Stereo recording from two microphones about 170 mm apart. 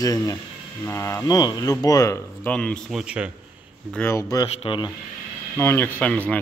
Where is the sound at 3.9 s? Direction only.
15° left (ahead or behind).